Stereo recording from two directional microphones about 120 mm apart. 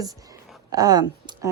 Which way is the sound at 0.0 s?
30° right (ahead or behind).